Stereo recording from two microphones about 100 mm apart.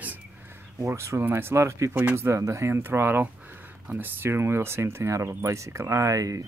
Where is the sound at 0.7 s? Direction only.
30° right (ahead or behind).